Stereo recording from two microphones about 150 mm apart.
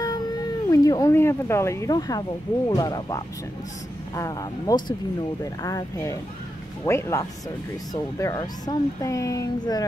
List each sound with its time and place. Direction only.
0.0 s speech: 25° left (ahead or behind)